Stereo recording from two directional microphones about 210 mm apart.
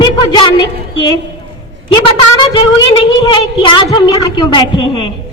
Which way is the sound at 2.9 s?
20° left (ahead or behind).